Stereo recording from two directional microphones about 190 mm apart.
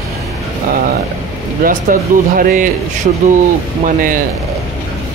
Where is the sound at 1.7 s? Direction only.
45° right (ahead or behind).